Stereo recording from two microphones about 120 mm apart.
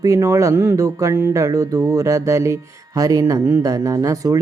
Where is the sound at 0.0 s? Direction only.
25° right (ahead or behind).